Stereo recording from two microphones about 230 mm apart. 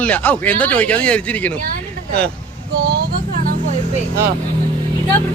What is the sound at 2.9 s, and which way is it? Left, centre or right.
Vehicle, right.